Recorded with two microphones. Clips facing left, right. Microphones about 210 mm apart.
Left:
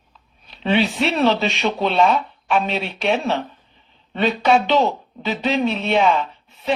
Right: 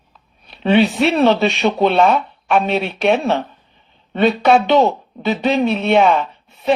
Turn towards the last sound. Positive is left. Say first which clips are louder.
# right 4 dB
turn(degrees=-55)  # may be behind; listen again after turning